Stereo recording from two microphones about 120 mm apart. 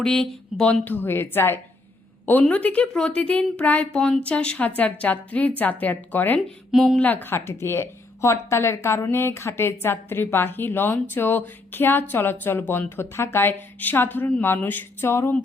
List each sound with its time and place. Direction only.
0.0 s speech: 5° left (ahead or behind)
6.7 s speech: centre (ahead or behind)
7.0 s a woman's voice: 15° left (ahead or behind)